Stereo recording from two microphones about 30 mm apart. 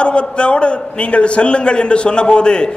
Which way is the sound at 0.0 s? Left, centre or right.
Left.